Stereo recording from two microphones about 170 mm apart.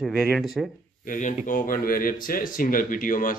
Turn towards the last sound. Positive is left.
turn(degrees=55)  # may be behind; listen again after turning